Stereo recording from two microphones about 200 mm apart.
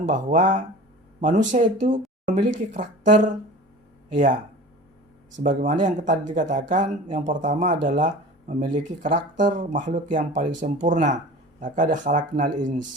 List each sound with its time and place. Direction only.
0.0 s speech: 40° right (ahead or behind)
5.4 s speech: 40° right (ahead or behind)